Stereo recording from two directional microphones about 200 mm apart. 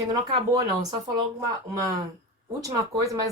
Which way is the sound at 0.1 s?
20° right (ahead or behind).